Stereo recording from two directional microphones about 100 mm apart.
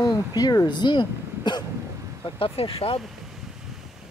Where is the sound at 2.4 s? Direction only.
75° left (ahead or behind).